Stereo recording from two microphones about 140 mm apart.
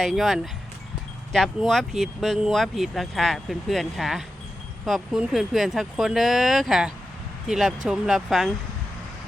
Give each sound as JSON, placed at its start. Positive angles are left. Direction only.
{"t": 0.0, "sound": "speech", "side_deg": 0}